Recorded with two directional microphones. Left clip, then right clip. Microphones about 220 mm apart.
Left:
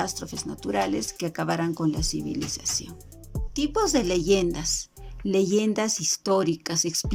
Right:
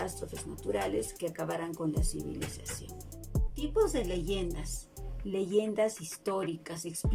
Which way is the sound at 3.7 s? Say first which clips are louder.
Left 5 dB; 50° left (ahead or behind).